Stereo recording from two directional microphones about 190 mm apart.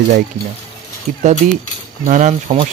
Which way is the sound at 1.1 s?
45° right (ahead or behind).